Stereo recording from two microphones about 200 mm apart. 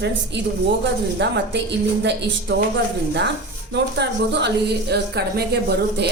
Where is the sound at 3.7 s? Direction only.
60° right (ahead or behind).